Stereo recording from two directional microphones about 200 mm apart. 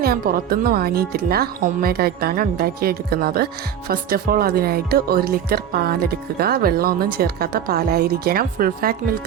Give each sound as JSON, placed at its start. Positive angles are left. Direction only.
{"t": 0.0, "sound": "speech", "side_deg": -50}